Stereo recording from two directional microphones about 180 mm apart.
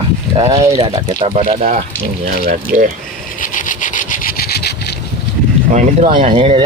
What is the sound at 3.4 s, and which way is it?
Vehicle, 45° left (ahead or behind).